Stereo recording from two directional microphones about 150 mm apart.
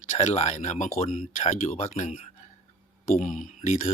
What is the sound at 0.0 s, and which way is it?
Speech, 50° left (ahead or behind).